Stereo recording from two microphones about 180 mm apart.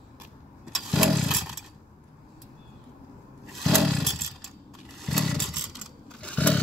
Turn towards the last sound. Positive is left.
turn(degrees=5)  # may be behind; listen again after turning